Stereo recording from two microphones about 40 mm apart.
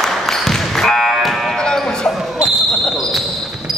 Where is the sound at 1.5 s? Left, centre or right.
Centre.